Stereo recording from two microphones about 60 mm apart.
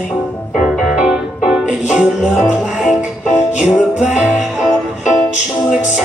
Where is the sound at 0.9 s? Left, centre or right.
Centre.